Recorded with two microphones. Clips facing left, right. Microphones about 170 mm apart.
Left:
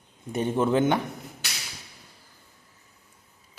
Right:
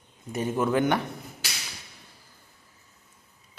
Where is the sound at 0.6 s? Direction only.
25° left (ahead or behind).